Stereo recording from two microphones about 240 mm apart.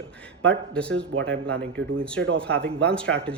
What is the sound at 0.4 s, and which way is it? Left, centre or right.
Speech, centre.